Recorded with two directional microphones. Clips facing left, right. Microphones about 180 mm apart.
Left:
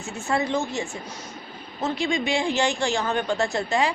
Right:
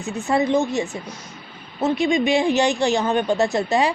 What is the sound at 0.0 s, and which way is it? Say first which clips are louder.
A woman's voice: right 5 dB; 15° right (ahead or behind).